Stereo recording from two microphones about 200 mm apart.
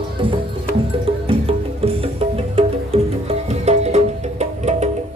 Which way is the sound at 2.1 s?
30° right (ahead or behind).